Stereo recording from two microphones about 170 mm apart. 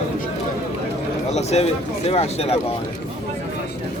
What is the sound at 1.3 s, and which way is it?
Speech, 40° left (ahead or behind).